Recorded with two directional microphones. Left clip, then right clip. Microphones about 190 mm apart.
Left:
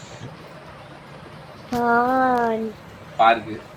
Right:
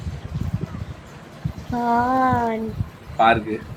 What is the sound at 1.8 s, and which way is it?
Speech, 15° left (ahead or behind).